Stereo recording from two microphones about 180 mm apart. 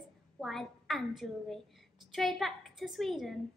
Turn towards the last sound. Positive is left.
turn(degrees=0)  # may be behind; listen again after turning